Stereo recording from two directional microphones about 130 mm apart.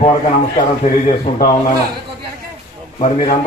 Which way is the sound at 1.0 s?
70° left (ahead or behind).